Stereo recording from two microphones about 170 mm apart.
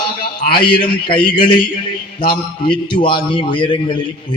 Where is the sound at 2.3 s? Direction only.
25° left (ahead or behind).